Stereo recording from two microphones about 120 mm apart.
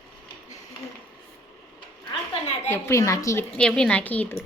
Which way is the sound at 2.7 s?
25° left (ahead or behind).